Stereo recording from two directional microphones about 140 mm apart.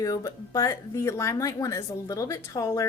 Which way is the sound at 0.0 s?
25° left (ahead or behind).